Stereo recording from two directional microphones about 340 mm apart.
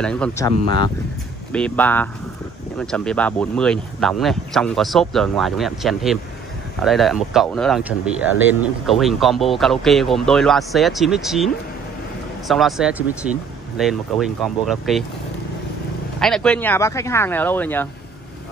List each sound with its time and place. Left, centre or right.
0.0 s speech: centre
16.2 s speech: centre